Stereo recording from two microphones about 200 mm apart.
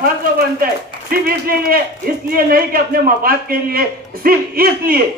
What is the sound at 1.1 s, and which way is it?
Speech, 45° right (ahead or behind).